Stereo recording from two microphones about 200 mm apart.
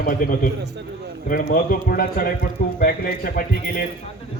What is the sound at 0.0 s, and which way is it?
A man's voice, 45° left (ahead or behind).